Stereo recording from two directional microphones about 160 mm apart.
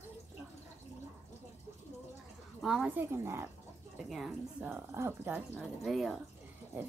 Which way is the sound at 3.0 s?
15° right (ahead or behind).